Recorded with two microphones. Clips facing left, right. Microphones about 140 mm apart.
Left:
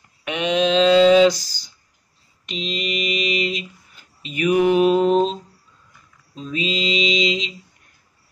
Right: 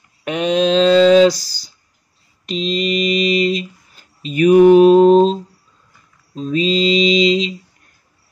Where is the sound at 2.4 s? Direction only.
35° right (ahead or behind).